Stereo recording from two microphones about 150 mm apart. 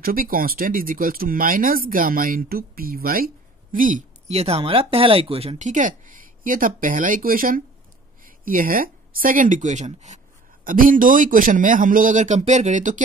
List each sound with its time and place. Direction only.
0.0 s speech: 70° right (ahead or behind)
3.7 s a woman's voice: 65° right (ahead or behind)
4.3 s a woman's voice: 45° right (ahead or behind)